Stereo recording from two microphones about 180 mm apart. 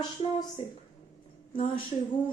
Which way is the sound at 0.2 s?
25° left (ahead or behind).